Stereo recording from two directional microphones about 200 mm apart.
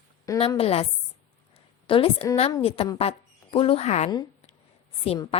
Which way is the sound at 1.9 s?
25° left (ahead or behind).